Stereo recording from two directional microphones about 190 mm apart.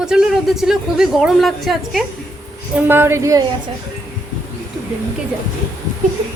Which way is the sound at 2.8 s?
10° right (ahead or behind).